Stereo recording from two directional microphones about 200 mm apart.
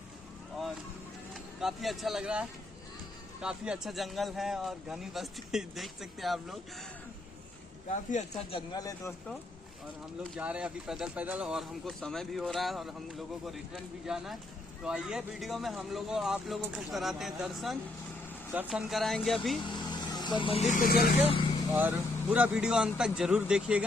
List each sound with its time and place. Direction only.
1.3 s speech: centre (ahead or behind)
7.9 s speech: 30° left (ahead or behind)
10.3 s speech: 5° right (ahead or behind)
19.6 s speech: 20° left (ahead or behind); by 21.1 s 45° left (ahead or behind)
21.2 s vehicle: 25° left (ahead or behind)
21.8 s speech: 5° right (ahead or behind)